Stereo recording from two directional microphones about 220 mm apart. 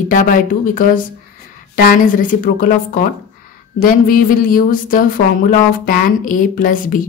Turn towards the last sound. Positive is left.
turn(degrees=40)  # may be behind; listen again after turning